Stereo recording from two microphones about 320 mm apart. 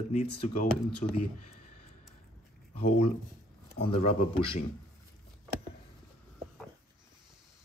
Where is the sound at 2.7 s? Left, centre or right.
Centre.